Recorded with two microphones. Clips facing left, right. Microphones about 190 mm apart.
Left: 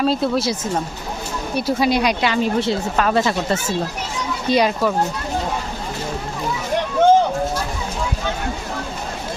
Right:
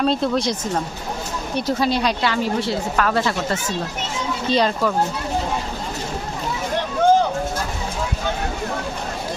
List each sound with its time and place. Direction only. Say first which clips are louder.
0.0 s speech: left 1 dB; 5° left (ahead or behind)